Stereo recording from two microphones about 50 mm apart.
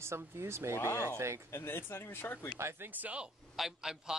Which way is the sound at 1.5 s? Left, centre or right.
Left.